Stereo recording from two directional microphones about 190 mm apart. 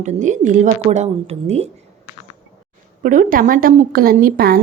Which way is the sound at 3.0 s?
45° right (ahead or behind).